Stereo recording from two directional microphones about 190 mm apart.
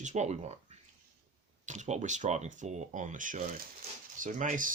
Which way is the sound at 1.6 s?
40° right (ahead or behind).